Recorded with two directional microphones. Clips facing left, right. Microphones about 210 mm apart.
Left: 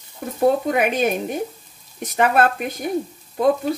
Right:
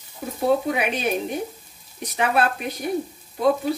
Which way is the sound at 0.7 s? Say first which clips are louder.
Left 5 dB; 45° left (ahead or behind).